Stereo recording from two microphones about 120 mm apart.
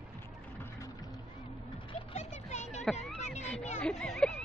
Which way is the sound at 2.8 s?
Centre (ahead or behind).